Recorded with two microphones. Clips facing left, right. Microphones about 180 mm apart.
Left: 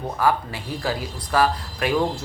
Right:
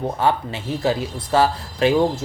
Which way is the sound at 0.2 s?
25° right (ahead or behind).